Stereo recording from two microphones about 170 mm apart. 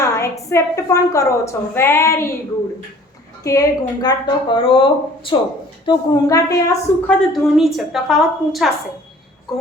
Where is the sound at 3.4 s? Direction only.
20° left (ahead or behind).